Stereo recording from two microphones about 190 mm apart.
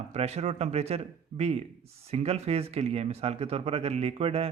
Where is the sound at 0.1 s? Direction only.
35° right (ahead or behind).